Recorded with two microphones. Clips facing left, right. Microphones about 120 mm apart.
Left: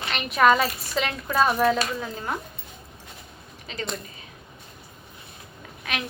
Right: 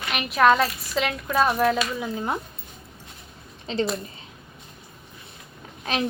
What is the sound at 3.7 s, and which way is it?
Speech, 30° right (ahead or behind).